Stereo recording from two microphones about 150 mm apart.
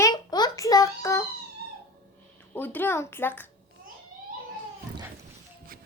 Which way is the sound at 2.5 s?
10° left (ahead or behind).